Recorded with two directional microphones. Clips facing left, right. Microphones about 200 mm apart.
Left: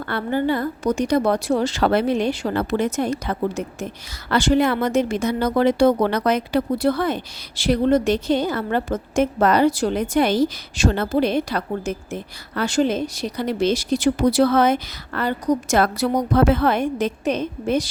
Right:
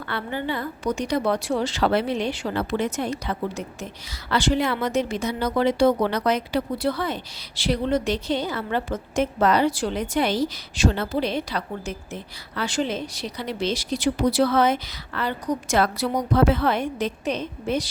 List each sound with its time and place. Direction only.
0.0 s a woman's voice: 45° left (ahead or behind)